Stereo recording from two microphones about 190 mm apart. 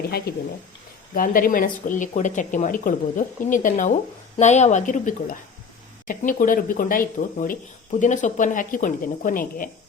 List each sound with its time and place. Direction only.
1.1 s a woman's voice: 50° left (ahead or behind)